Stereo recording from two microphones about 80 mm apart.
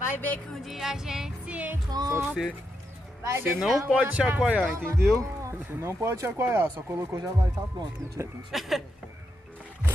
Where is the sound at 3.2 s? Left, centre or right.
Right.